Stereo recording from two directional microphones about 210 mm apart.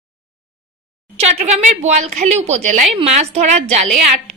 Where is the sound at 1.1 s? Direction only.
30° right (ahead or behind).